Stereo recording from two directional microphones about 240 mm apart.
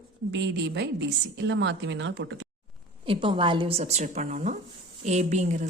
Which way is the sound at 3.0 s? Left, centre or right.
Right.